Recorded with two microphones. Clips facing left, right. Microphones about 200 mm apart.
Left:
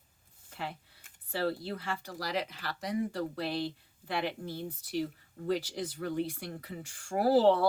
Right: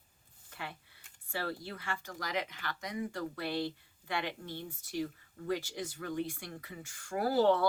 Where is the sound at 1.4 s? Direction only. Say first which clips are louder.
Left 6 dB; 30° left (ahead or behind).